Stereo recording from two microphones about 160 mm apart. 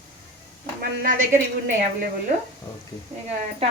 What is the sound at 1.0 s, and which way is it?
Speech, 55° right (ahead or behind).